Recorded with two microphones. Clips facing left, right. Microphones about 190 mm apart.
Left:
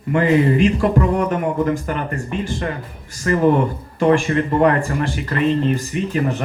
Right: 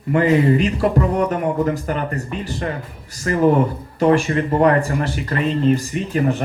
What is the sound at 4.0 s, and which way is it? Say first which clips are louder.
Speech: even; 40° right (ahead or behind).